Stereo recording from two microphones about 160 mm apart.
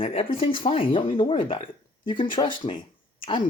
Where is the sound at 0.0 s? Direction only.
40° left (ahead or behind).